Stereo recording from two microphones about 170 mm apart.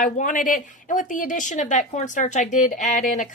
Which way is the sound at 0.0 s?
50° left (ahead or behind).